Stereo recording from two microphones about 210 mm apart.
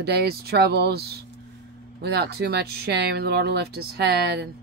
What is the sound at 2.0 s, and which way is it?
Speech, 50° right (ahead or behind).